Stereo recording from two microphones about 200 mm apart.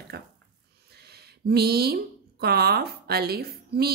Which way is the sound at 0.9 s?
55° right (ahead or behind).